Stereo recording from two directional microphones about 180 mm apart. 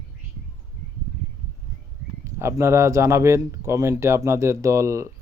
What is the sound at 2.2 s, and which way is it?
Speech, 15° right (ahead or behind).